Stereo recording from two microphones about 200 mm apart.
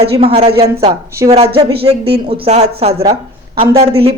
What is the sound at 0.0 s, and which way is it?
Speech, 30° right (ahead or behind).